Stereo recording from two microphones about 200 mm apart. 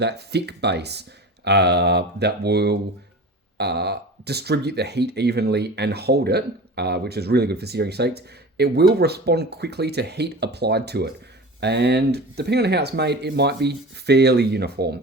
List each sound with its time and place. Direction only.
0.0 s speech: 55° right (ahead or behind)